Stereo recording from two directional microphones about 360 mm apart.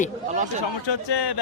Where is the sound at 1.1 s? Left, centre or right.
Left.